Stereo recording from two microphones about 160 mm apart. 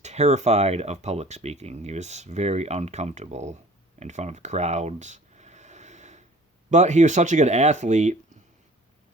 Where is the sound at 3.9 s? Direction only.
45° right (ahead or behind).